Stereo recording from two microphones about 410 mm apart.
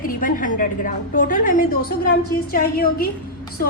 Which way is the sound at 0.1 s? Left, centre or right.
Centre.